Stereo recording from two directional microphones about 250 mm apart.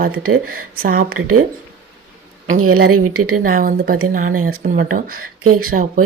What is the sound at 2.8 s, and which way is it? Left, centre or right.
Speech, right.